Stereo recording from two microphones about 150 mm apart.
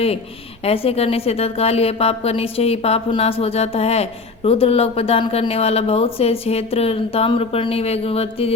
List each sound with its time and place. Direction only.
0.6 s a woman's voice: 40° left (ahead or behind)